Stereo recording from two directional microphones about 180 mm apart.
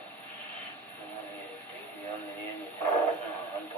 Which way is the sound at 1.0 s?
10° left (ahead or behind).